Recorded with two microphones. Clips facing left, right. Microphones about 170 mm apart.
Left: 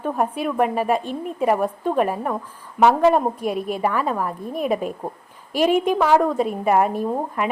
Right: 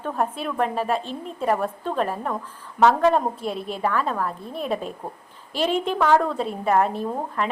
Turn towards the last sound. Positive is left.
turn(degrees=10)  # may be behind; listen again after turning